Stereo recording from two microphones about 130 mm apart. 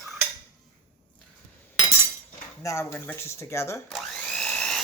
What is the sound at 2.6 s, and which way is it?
Speech, 20° left (ahead or behind).